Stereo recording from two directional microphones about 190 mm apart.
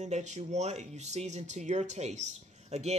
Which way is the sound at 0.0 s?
35° right (ahead or behind).